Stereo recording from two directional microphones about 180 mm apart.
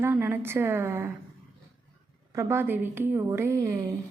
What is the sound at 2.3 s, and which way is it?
A woman's voice, 15° right (ahead or behind).